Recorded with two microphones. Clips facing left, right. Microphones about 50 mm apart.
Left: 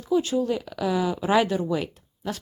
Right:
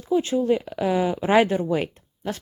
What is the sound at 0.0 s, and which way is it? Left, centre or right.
Speech, right.